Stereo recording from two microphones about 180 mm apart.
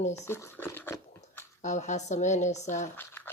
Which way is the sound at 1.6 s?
40° left (ahead or behind).